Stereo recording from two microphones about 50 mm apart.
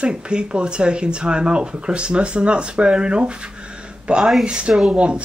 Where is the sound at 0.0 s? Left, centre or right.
Centre.